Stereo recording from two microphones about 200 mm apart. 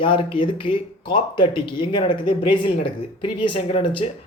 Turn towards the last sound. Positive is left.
turn(degrees=25)  # may be behind; listen again after turning